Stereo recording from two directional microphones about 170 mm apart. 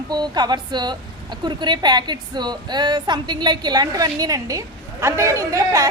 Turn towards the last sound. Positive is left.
turn(degrees=-20)  # may be behind; listen again after turning